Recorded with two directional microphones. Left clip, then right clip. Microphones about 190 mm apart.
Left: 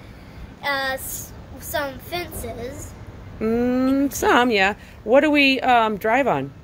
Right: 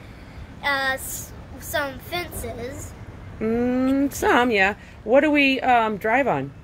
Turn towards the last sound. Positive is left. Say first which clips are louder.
# left 1 dB
turn(degrees=5)  # may be behind; listen again after turning